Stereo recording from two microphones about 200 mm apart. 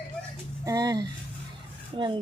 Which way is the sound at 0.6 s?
20° right (ahead or behind).